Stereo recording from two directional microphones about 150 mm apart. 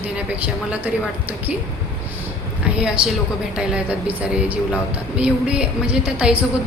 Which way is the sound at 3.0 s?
5° right (ahead or behind).